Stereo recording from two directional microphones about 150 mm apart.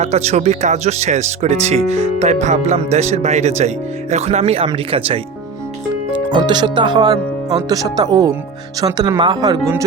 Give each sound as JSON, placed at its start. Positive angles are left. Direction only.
{"t": 0.0, "sound": "speech", "side_deg": -45}
{"t": 6.3, "sound": "speech", "side_deg": -30}